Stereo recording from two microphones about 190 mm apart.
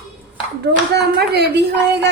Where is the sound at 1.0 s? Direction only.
60° right (ahead or behind).